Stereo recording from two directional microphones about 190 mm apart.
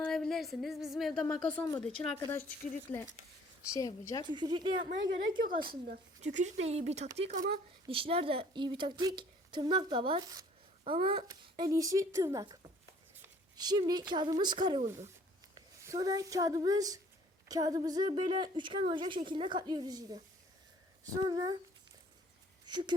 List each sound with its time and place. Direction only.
0.0 s speech: 5° left (ahead or behind)
3.7 s a woman's voice: 20° left (ahead or behind)
4.3 s a woman's voice: 25° right (ahead or behind)
5.5 s a woman's voice: 50° right (ahead or behind)
6.2 s speech: 35° right (ahead or behind)
7.3 s a woman's voice: 45° right (ahead or behind)
7.9 s a woman's voice: 30° right (ahead or behind)
22.6 s speech: 25° right (ahead or behind)